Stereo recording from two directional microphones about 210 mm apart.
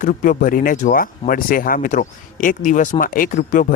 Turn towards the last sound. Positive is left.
turn(degrees=40)  # may be behind; listen again after turning